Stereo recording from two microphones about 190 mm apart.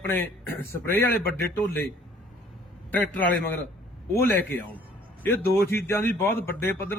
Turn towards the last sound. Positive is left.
turn(degrees=10)  # may be behind; listen again after turning